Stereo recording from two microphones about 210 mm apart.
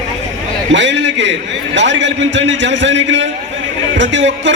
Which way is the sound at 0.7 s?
60° right (ahead or behind).